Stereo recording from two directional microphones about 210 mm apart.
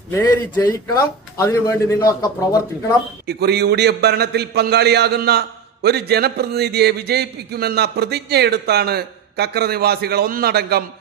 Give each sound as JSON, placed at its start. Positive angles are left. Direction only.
{"t": 0.1, "sound": "a man's voice", "side_deg": 15}
{"t": 3.2, "sound": "a man's voice", "side_deg": -50}